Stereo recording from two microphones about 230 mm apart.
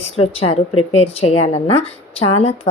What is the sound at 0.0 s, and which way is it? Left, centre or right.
A woman's voice, left.